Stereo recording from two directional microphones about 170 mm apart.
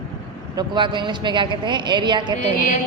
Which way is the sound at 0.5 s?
25° right (ahead or behind).